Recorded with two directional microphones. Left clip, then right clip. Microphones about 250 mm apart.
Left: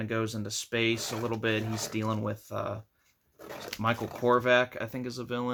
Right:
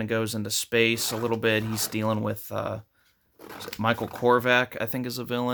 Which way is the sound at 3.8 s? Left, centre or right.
Right.